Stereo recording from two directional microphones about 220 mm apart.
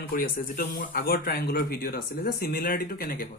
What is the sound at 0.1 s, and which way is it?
Speech, 40° left (ahead or behind).